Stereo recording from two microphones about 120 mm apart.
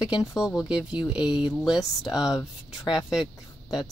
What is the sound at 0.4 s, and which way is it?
Speech, 5° right (ahead or behind).